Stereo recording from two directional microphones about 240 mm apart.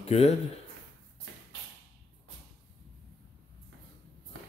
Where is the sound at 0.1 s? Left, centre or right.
Left.